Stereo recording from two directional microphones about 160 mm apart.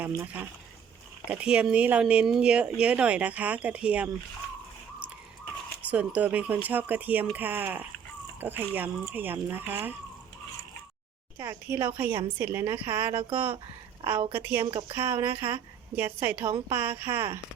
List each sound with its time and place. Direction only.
1.3 s speech: 10° right (ahead or behind)
5.8 s speech: 10° right (ahead or behind)
11.3 s a woman's voice: 15° right (ahead or behind)
14.7 s speech: 35° right (ahead or behind)
14.9 s speech: 15° right (ahead or behind)